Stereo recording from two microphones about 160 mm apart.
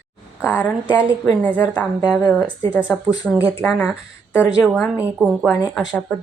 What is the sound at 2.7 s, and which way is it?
Speech, 20° left (ahead or behind).